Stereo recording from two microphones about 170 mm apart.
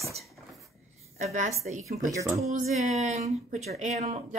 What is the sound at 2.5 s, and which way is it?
Speech, 40° right (ahead or behind).